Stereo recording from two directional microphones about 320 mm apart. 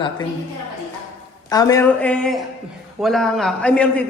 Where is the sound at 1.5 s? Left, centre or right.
Centre.